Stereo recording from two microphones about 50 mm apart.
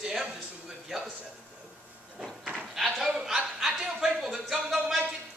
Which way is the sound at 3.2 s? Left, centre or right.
Centre.